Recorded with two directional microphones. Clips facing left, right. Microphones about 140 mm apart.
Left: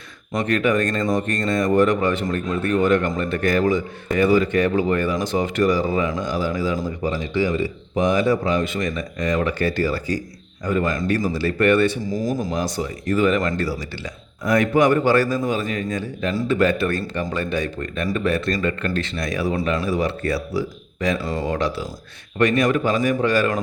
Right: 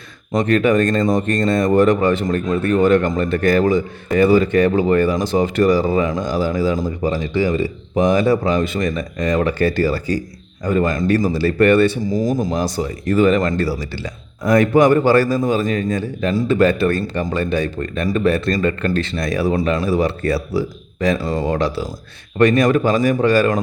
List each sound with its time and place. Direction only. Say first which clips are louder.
0.3 s speech: right 5 dB; 30° right (ahead or behind)